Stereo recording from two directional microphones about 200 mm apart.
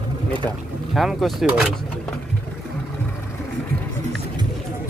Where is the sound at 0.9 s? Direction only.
Centre (ahead or behind).